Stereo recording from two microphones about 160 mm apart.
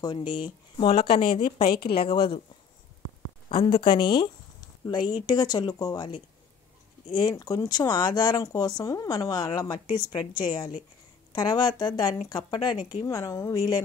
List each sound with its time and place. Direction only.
0.0 s speech: 30° left (ahead or behind)
3.4 s speech: 35° left (ahead or behind)